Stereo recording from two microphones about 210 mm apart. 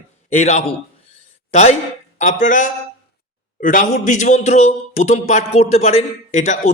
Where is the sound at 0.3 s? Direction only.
35° left (ahead or behind).